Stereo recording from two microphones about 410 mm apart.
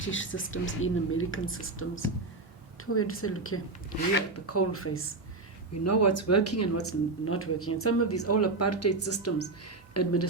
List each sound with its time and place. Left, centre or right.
0.0 s speech: left